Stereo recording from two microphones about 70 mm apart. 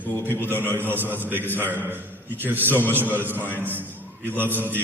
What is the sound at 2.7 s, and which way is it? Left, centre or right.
Speech, left.